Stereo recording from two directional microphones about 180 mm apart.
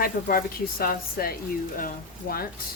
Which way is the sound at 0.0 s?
55° left (ahead or behind).